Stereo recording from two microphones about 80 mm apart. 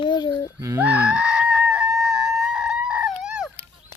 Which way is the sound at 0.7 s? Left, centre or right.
Centre.